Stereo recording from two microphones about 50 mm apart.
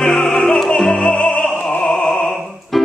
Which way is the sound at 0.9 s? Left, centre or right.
Centre.